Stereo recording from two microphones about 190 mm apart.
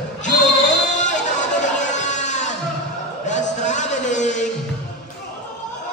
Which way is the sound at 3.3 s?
40° left (ahead or behind).